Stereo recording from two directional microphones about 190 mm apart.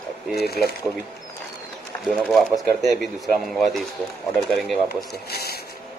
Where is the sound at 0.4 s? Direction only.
55° left (ahead or behind).